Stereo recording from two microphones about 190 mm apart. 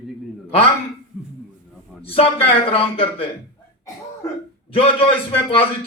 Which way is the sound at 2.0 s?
30° left (ahead or behind).